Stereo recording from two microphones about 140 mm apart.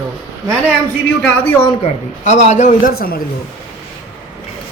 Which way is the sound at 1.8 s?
60° left (ahead or behind).